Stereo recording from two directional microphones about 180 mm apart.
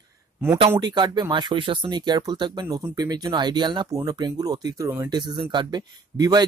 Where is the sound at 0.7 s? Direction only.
25° right (ahead or behind).